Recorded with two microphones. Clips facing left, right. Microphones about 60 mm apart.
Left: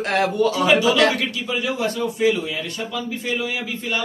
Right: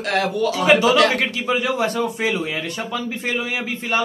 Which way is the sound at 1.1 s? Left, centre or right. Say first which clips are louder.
Right 4 dB; right.